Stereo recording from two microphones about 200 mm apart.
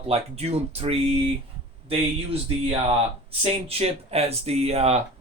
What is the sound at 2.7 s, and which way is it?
Speech, 30° right (ahead or behind).